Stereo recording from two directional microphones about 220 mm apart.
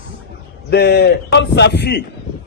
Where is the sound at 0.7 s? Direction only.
45° left (ahead or behind).